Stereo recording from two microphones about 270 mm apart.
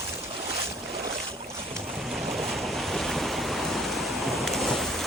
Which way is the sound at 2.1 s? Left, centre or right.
Centre.